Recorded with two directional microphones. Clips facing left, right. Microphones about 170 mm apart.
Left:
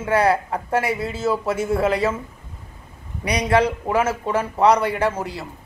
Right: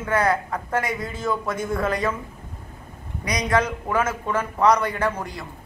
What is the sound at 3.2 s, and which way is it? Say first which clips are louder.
A man's voice: left 4 dB; 30° left (ahead or behind).